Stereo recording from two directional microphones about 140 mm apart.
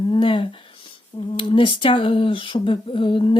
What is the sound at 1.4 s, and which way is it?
Speech, 40° left (ahead or behind).